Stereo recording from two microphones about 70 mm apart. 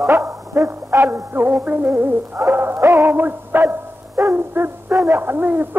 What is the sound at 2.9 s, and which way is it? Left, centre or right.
Synthetic singing, right.